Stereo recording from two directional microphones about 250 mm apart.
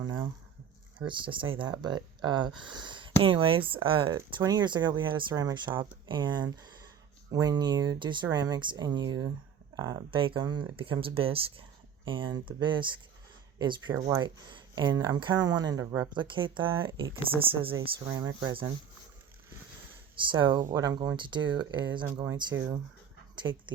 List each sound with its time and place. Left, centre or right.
0.0 s speech: centre
20.1 s speech: centre